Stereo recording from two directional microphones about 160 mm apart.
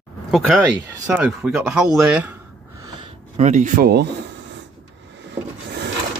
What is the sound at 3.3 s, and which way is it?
Speech, 50° right (ahead or behind).